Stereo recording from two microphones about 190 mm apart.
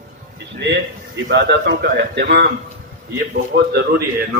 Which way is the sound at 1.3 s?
65° right (ahead or behind).